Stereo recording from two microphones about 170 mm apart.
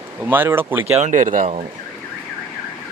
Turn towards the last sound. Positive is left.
turn(degrees=-50)  # may be behind; listen again after turning